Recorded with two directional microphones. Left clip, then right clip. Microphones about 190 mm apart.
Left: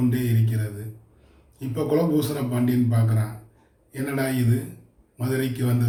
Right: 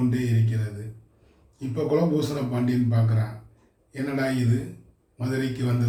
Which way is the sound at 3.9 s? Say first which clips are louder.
Even; 15° left (ahead or behind).